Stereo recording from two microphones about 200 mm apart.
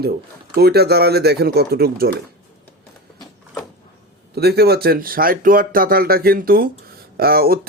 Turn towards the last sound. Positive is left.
turn(degrees=-50)  # may be behind; listen again after turning